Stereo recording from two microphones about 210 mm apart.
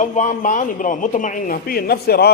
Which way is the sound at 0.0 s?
35° left (ahead or behind).